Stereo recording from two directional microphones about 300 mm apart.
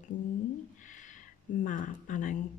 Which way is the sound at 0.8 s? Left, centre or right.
Left.